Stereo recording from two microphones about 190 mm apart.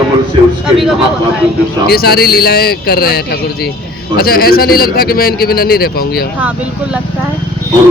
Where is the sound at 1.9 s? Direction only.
55° left (ahead or behind).